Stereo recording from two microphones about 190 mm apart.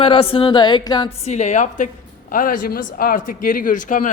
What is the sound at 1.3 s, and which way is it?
Speech, 35° left (ahead or behind).